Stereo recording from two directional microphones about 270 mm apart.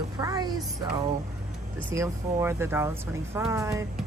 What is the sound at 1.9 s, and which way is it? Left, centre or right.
Speech, centre.